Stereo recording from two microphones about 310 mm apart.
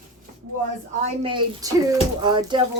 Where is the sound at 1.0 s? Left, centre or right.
Centre.